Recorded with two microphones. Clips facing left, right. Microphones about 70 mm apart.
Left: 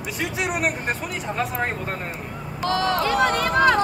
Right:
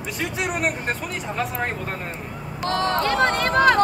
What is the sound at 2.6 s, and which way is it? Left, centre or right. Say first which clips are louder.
Speech: even; right.